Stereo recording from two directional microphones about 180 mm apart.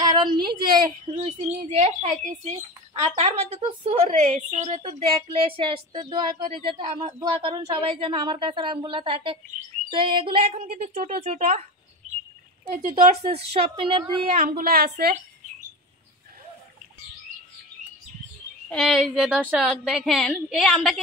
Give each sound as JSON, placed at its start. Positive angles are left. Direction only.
{"t": 0.0, "sound": "a sound", "side_deg": -25}
{"t": 0.5, "sound": "a woman's voice", "side_deg": -25}
{"t": 12.9, "sound": "a woman's voice", "side_deg": -35}
{"t": 14.6, "sound": "a woman's voice", "side_deg": -60}
{"t": 18.7, "sound": "a woman's voice", "side_deg": 0}